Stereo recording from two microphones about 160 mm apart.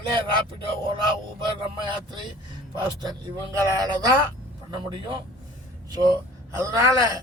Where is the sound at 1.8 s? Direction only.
30° right (ahead or behind).